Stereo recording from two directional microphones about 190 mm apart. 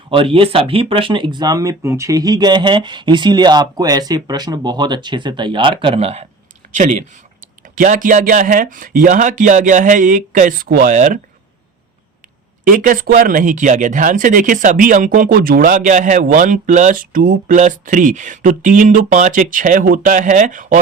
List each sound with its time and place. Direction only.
0.1 s speech: 30° right (ahead or behind)
12.6 s speech: 45° right (ahead or behind)